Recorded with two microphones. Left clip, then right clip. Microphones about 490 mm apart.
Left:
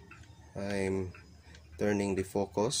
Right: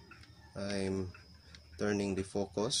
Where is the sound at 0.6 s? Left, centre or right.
Right.